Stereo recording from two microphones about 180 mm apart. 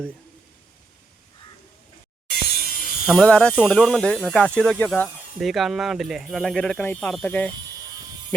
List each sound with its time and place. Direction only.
2.3 s music: 55° left (ahead or behind)
3.1 s speech: centre (ahead or behind)